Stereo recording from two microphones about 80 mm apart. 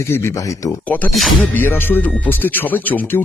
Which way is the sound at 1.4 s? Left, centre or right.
Left.